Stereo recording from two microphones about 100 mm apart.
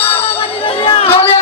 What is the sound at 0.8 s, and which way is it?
Chatter, 70° left (ahead or behind).